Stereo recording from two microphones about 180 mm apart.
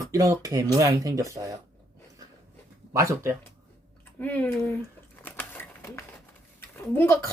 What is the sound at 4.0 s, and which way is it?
Typewriter, 10° left (ahead or behind).